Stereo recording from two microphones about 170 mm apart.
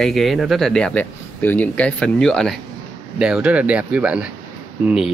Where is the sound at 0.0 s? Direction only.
Centre (ahead or behind).